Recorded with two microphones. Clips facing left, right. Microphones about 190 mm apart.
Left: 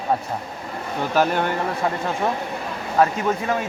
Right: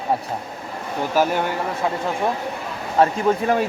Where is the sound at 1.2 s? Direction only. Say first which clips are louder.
Even; 10° right (ahead or behind).